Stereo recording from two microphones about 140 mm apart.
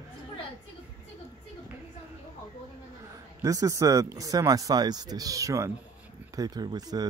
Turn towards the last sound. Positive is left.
turn(degrees=-30)  # may be behind; listen again after turning